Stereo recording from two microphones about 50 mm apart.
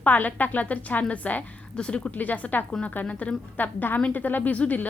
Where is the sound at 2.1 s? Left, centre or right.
Left.